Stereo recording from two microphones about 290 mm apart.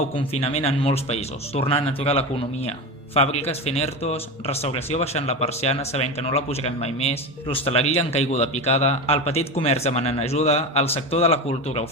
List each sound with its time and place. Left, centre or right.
0.4 s speech: left